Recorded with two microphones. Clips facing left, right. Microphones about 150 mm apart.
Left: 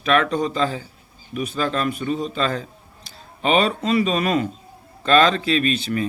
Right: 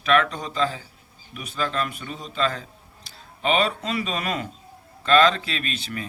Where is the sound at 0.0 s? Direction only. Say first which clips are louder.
Left 3 dB; 40° left (ahead or behind).